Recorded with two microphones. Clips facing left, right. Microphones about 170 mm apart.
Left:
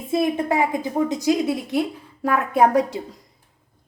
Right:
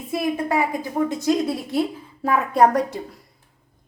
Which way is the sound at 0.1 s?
25° left (ahead or behind).